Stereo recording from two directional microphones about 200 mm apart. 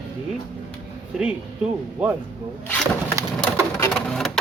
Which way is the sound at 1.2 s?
5° right (ahead or behind).